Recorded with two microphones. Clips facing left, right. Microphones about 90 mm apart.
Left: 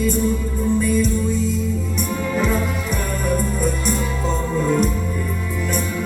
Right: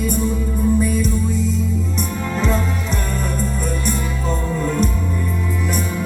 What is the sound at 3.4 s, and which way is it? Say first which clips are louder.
Music: left 1 dB; 15° left (ahead or behind).